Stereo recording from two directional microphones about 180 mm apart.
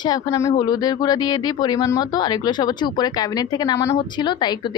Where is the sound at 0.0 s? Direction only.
20° left (ahead or behind).